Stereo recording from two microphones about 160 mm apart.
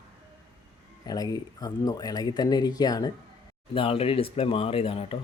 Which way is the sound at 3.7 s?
35° left (ahead or behind).